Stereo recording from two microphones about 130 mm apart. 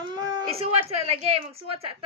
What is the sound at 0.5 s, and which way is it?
A woman's voice, 50° right (ahead or behind).